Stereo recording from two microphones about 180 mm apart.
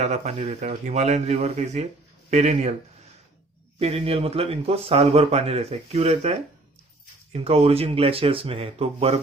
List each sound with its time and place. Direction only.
0.0 s speech: 40° right (ahead or behind)
3.8 s speech: 35° right (ahead or behind)
7.3 s speech: 35° right (ahead or behind)